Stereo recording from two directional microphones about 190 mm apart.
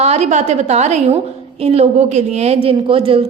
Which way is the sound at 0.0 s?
35° right (ahead or behind).